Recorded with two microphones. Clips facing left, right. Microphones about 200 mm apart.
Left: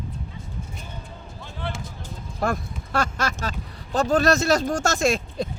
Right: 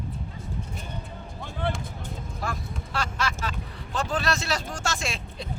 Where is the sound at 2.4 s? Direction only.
45° left (ahead or behind).